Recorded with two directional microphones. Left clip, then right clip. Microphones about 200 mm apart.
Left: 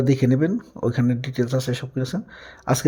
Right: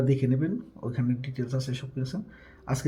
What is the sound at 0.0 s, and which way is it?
A man's voice, 50° left (ahead or behind).